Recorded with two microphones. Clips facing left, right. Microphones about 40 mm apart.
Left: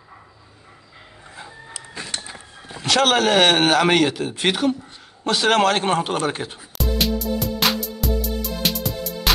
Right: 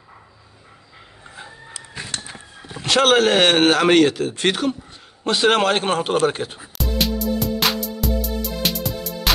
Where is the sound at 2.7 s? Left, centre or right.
Centre.